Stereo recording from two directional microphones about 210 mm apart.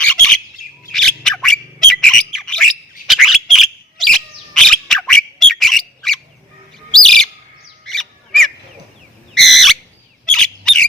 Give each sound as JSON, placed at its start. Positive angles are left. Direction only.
{"t": 0.0, "sound": "bird", "side_deg": 5}
{"t": 0.9, "sound": "squawk", "side_deg": 5}
{"t": 6.9, "sound": "bird", "side_deg": 0}
{"t": 9.3, "sound": "a sound", "side_deg": 0}
{"t": 10.2, "sound": "bird", "side_deg": 5}